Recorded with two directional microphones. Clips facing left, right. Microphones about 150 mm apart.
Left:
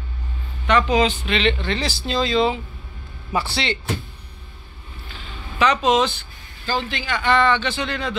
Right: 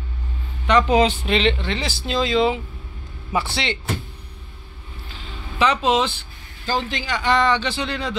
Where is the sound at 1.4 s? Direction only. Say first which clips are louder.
Left 1 dB; 30° right (ahead or behind).